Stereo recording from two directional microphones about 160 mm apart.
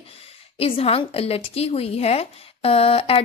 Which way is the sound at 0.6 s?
35° left (ahead or behind).